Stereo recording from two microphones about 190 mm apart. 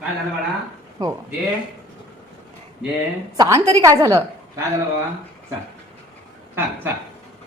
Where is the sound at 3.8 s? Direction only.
15° right (ahead or behind).